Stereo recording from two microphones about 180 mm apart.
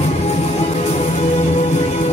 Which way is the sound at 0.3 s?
35° left (ahead or behind).